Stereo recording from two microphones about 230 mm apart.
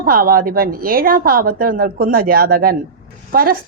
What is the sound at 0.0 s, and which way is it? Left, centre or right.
A woman's voice, right.